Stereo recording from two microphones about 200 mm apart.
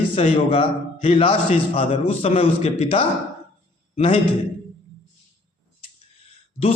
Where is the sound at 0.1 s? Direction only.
25° left (ahead or behind).